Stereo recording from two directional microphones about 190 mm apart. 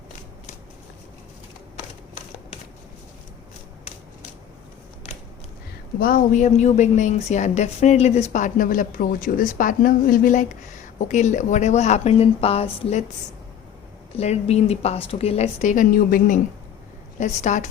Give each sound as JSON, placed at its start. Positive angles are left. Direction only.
{"t": 5.0, "sound": "a sound", "side_deg": 30}
{"t": 6.0, "sound": "a woman's voice", "side_deg": 45}
{"t": 14.2, "sound": "a woman's voice", "side_deg": 35}